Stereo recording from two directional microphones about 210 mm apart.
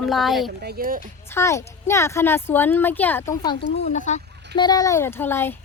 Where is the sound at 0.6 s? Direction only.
45° right (ahead or behind).